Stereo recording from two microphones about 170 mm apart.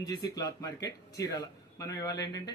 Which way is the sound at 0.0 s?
25° left (ahead or behind).